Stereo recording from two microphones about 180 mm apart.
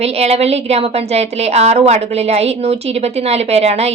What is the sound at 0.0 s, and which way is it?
A woman's voice, 35° right (ahead or behind).